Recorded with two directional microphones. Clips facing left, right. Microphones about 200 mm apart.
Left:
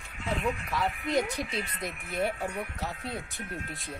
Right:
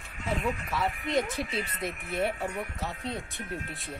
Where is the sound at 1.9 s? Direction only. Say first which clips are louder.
Even; 35° right (ahead or behind).